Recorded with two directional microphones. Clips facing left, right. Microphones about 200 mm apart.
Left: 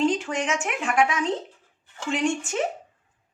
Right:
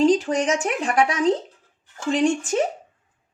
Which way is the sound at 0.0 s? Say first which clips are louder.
Right 6 dB; 35° right (ahead or behind).